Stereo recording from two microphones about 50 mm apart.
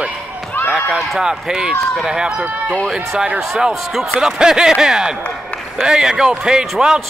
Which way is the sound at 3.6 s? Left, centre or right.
Centre.